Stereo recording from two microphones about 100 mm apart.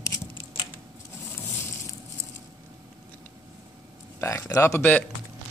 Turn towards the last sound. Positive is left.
turn(degrees=15)  # may be behind; listen again after turning